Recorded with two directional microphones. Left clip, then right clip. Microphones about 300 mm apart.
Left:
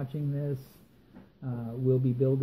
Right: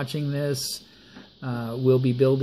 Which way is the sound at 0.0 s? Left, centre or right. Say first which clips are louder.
Right 8 dB; right.